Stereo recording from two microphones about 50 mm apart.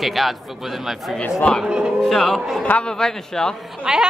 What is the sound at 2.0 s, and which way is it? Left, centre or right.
A woman's voice, centre.